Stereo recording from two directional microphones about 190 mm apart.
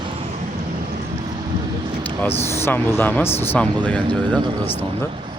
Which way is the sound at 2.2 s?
10° left (ahead or behind).